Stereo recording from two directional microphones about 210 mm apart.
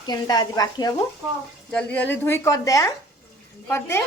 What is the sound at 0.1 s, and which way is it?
Speech, 20° left (ahead or behind).